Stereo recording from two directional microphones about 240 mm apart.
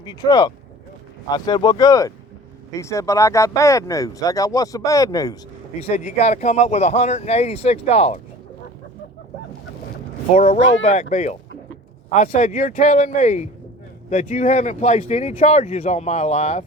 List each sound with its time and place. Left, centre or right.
0.0 s speech: centre
5.9 s speech: left
10.3 s speech: left